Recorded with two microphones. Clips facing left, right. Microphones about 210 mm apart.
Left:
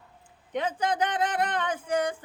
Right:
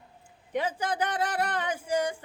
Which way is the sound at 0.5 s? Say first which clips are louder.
Left 2 dB; 10° right (ahead or behind).